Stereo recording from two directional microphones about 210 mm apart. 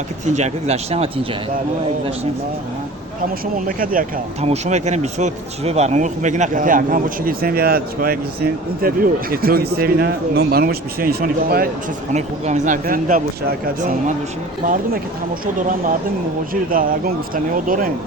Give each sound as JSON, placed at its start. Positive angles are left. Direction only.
{"t": 0.3, "sound": "speech", "side_deg": -30}
{"t": 3.4, "sound": "speech", "side_deg": -40}
{"t": 12.1, "sound": "speech", "side_deg": -35}
{"t": 15.5, "sound": "speech", "side_deg": -40}